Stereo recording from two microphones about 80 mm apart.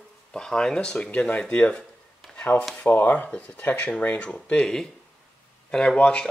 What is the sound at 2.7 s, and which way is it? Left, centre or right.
Speech, left.